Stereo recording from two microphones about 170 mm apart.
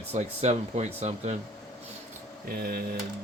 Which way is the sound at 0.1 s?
40° right (ahead or behind).